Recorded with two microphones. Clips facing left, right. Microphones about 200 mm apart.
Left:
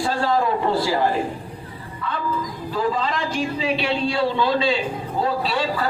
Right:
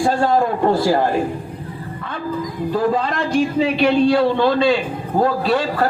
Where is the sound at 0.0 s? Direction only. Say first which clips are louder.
Right 4 dB; 50° right (ahead or behind).